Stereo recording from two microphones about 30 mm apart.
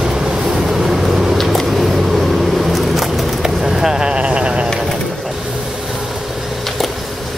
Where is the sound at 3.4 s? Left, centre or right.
Centre.